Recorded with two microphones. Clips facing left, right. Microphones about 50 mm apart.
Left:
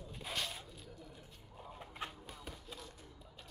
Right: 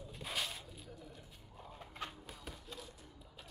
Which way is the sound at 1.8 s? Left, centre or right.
Centre.